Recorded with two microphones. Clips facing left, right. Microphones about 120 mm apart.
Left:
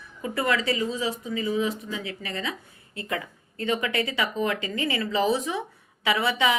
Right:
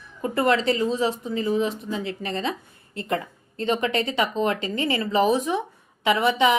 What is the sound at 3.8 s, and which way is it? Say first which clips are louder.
Speech: right 4 dB; 25° right (ahead or behind).